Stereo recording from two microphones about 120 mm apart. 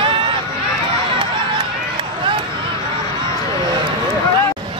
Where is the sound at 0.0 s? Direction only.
45° right (ahead or behind).